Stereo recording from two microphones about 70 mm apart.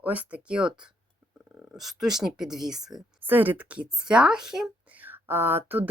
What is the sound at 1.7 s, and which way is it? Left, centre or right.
Speech, centre.